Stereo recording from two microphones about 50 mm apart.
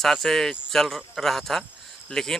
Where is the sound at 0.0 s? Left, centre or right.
Centre.